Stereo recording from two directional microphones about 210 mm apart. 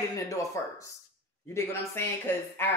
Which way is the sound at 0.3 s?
15° left (ahead or behind).